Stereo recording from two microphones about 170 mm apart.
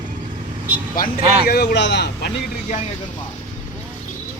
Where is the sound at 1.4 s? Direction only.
65° left (ahead or behind); by 2.3 s 85° left.